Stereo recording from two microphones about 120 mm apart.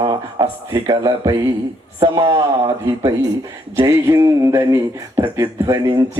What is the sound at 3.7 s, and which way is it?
Music, 25° right (ahead or behind).